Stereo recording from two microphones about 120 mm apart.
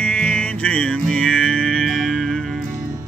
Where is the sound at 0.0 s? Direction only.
10° left (ahead or behind).